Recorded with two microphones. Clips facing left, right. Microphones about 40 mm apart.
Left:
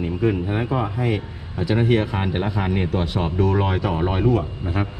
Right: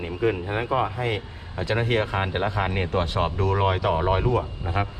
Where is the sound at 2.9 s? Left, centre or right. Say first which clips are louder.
Even; right.